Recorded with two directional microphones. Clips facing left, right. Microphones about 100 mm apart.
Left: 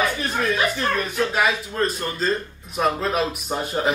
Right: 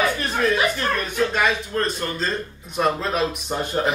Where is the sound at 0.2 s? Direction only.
Centre (ahead or behind).